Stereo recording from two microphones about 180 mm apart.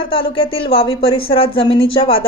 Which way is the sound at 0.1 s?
30° left (ahead or behind).